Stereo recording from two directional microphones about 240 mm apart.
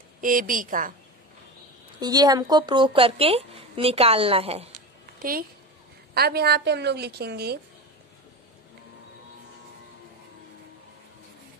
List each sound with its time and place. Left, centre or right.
0.2 s a woman's voice: right
2.0 s speech: centre
6.1 s a woman's voice: right